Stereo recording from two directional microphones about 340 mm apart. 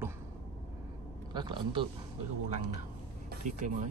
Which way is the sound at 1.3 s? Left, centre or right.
Centre.